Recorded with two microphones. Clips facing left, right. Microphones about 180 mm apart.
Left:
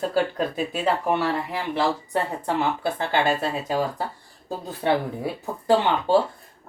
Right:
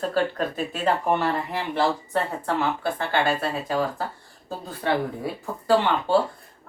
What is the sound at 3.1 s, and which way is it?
A woman's voice, 15° left (ahead or behind).